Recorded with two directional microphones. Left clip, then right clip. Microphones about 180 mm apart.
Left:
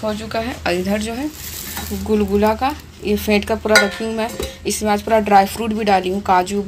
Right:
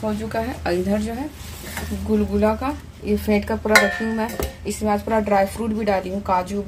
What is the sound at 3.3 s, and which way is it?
Speech, 15° left (ahead or behind).